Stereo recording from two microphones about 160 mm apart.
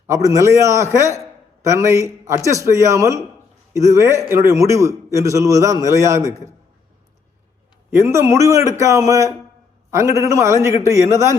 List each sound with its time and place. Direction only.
0.1 s a man's voice: 20° right (ahead or behind)
7.9 s a man's voice: 15° right (ahead or behind)